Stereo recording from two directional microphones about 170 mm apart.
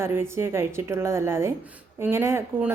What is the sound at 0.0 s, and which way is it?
A woman's voice, 15° right (ahead or behind).